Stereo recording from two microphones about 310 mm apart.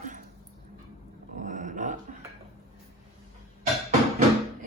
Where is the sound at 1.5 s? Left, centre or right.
Right.